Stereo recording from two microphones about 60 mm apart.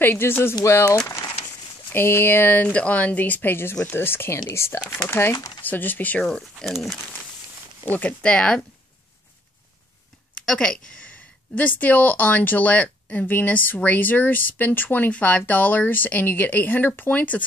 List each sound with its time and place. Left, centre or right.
0.0 s speech: left
1.9 s speech: left
5.6 s speech: left
6.6 s speech: centre
8.2 s speech: centre
10.3 s a sound: centre
11.5 s speech: left